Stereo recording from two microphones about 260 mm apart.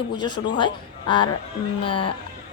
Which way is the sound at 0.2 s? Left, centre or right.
Centre.